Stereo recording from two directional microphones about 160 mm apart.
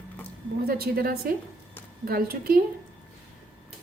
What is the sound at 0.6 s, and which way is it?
A woman's voice, 70° right (ahead or behind).